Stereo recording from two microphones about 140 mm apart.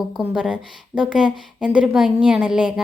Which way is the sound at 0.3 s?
5° right (ahead or behind).